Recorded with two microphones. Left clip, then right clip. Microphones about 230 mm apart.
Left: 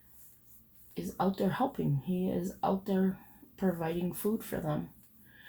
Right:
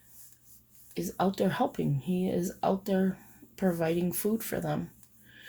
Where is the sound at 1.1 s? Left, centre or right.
Right.